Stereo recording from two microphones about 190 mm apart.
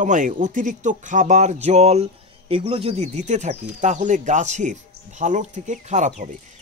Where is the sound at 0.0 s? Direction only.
40° right (ahead or behind).